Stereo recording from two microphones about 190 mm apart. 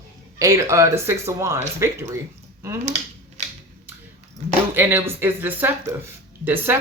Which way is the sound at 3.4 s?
40° right (ahead or behind).